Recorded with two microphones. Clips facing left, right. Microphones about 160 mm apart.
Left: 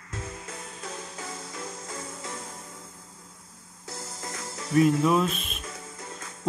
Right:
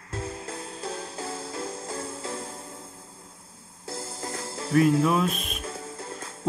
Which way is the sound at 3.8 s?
30° right (ahead or behind).